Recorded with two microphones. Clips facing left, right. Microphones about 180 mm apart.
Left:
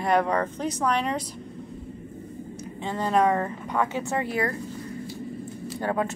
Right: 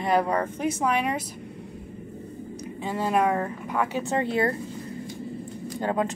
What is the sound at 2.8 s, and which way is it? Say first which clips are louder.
Speech: left 1 dB; 10° right (ahead or behind).